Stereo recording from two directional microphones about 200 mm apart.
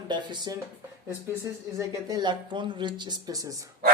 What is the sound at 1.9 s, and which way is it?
Speech, 20° right (ahead or behind).